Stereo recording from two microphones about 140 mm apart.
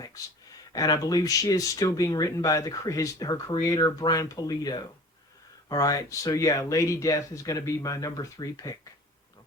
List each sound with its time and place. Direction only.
0.7 s speech: 25° left (ahead or behind)